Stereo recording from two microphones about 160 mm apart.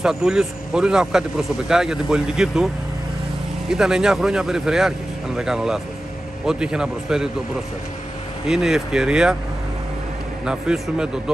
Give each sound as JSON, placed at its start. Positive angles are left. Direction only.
{"t": 0.0, "sound": "speech", "side_deg": -5}
{"t": 8.5, "sound": "speech", "side_deg": -5}
{"t": 10.4, "sound": "speech", "side_deg": -5}